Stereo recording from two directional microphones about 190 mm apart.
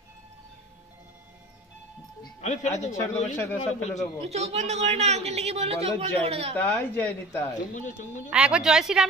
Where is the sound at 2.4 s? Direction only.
40° left (ahead or behind).